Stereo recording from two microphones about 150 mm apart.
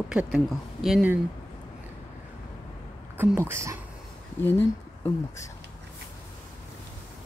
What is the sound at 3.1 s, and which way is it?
Speech, 15° right (ahead or behind).